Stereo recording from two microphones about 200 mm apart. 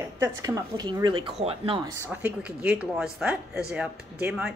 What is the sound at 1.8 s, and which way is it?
A woman's voice, 10° right (ahead or behind).